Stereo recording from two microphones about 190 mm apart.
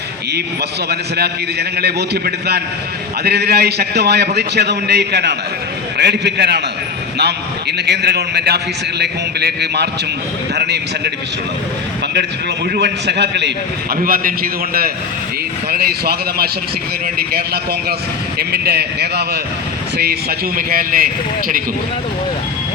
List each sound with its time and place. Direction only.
0.9 s a man's voice: 60° right (ahead or behind)
12.7 s a man's voice: 60° right (ahead or behind)
13.9 s a man's voice: 50° right (ahead or behind)
20.6 s a man's voice: 50° right (ahead or behind)